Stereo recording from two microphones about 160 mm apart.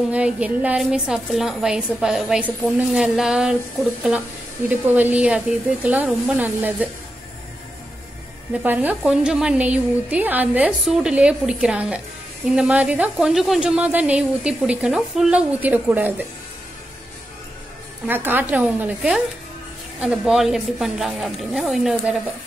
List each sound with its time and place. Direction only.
0.1 s a woman's voice: 10° right (ahead or behind)
4.6 s a woman's voice: 10° right (ahead or behind)
8.6 s a woman's voice: 10° right (ahead or behind)
18.0 s a woman's voice: 10° right (ahead or behind)